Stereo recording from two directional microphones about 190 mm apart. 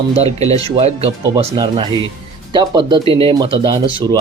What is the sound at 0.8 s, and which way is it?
Speech, 35° right (ahead or behind).